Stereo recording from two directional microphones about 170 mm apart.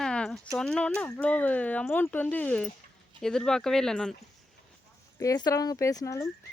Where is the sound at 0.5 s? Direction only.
5° left (ahead or behind).